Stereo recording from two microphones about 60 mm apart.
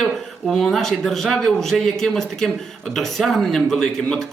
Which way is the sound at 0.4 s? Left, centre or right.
Centre.